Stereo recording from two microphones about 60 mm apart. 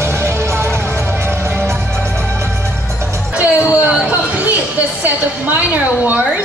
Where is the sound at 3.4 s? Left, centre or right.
Right.